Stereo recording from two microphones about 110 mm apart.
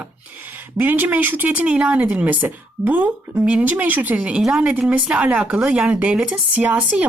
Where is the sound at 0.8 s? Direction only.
15° right (ahead or behind).